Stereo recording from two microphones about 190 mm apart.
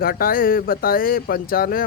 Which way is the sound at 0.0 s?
50° left (ahead or behind).